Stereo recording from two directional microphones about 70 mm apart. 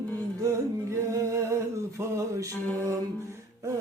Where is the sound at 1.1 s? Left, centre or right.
Right.